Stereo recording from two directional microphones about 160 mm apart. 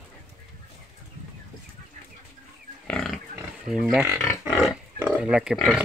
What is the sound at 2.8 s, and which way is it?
Pig, centre (ahead or behind).